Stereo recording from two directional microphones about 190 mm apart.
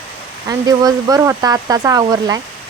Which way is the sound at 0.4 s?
20° right (ahead or behind).